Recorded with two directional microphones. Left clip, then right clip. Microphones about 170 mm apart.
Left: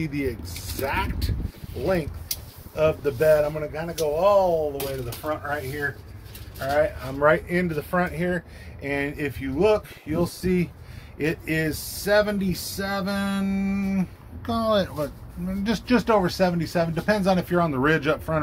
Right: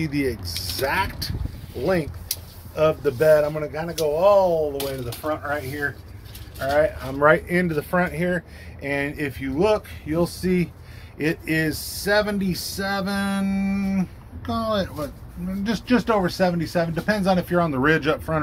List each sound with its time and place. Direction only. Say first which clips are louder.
0.0 s speech: right 3 dB; centre (ahead or behind)
1.8 s speech: right 2 dB; 35° right (ahead or behind)
2.7 s speech: right 2 dB; 5° right (ahead or behind)
14.4 s speech: left 2 dB; 30° left (ahead or behind); by 18.4 s 10° left (ahead or behind)